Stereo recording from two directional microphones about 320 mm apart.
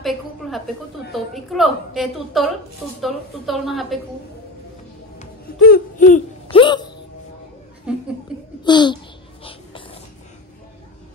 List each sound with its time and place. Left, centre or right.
1.1 s a woman's voice: centre
5.2 s a sound: left
7.9 s chuckle: centre
8.6 s babbling: centre